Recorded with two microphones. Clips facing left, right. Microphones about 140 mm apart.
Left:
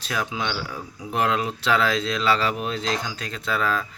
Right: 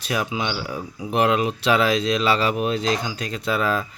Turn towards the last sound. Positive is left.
turn(degrees=-15)  # may be behind; listen again after turning